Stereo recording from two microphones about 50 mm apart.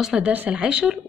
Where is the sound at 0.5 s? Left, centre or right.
Centre.